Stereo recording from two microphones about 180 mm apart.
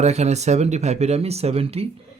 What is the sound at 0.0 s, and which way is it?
A man's voice, 40° right (ahead or behind).